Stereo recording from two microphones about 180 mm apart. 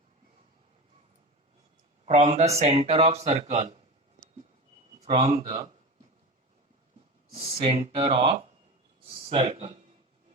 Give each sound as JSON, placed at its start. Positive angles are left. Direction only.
{"t": 2.0, "sound": "speech", "side_deg": -40}
{"t": 4.9, "sound": "a man's voice", "side_deg": -35}
{"t": 7.3, "sound": "speech", "side_deg": -35}